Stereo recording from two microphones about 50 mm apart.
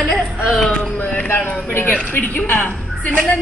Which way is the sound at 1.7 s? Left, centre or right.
Left.